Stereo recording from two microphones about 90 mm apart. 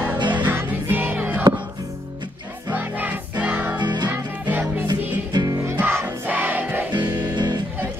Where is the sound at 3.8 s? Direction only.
55° right (ahead or behind).